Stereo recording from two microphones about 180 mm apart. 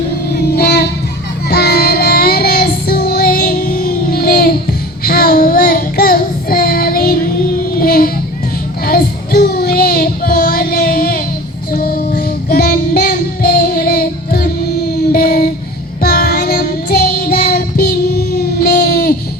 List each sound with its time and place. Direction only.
0.3 s child singing: 60° left (ahead or behind)